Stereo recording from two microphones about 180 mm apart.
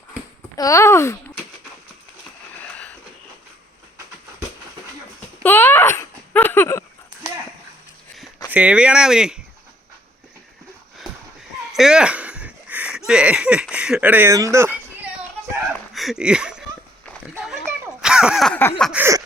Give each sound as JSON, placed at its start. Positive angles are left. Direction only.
{"t": 0.5, "sound": "a child's voice", "side_deg": 20}
{"t": 5.4, "sound": "a sound", "side_deg": 10}
{"t": 8.5, "sound": "speech", "side_deg": -5}
{"t": 11.7, "sound": "a sound", "side_deg": -5}
{"t": 13.1, "sound": "speech", "side_deg": -5}
{"t": 14.5, "sound": "children playing", "side_deg": -15}
{"t": 16.0, "sound": "speech", "side_deg": 0}
{"t": 17.3, "sound": "a sound", "side_deg": -10}
{"t": 18.8, "sound": "speech", "side_deg": -5}